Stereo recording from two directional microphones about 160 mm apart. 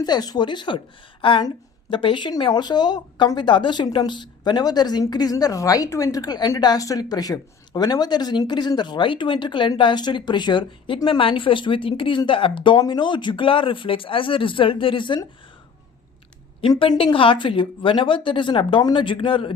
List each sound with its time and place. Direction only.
0.0 s a woman's voice: 25° left (ahead or behind)
16.6 s speech: 35° left (ahead or behind)